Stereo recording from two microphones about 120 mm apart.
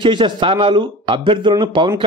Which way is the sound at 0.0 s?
45° right (ahead or behind).